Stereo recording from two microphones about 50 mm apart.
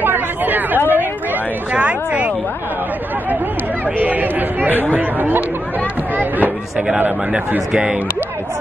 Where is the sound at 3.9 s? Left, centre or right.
Right.